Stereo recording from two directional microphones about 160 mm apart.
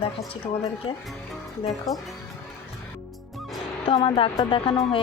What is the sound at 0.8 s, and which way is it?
Speech, 30° left (ahead or behind).